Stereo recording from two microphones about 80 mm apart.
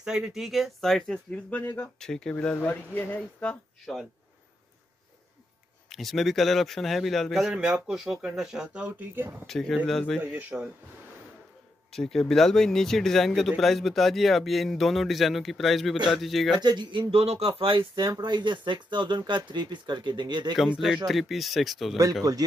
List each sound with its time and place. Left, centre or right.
0.0 s a man's voice: centre
1.6 s speech: left
2.0 s speech: centre
2.5 s speech: left
3.8 s a man's voice: centre
5.9 s a man's voice: centre
10.5 s speech: centre
11.9 s a man's voice: centre
16.6 s speech: right
21.1 s a man's voice: centre
22.2 s speech: right